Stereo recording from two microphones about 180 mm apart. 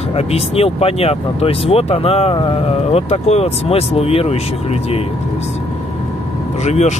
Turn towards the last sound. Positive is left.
turn(degrees=40)  # may be behind; listen again after turning